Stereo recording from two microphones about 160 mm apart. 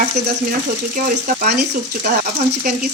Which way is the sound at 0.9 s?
60° right (ahead or behind).